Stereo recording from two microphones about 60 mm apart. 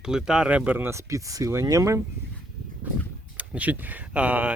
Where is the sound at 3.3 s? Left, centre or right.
Right.